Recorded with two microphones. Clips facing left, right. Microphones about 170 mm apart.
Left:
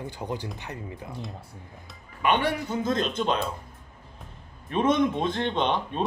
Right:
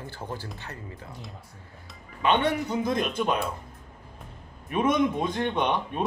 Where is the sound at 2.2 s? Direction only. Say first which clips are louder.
Right 1 dB; 25° right (ahead or behind).